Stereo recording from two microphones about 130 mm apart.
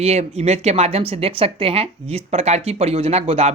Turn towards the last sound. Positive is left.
turn(degrees=-55)  # may be behind; listen again after turning